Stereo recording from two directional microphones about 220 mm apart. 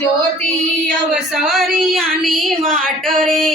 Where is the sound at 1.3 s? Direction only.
Centre (ahead or behind).